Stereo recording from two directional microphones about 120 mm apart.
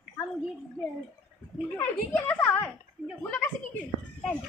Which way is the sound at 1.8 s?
15° left (ahead or behind).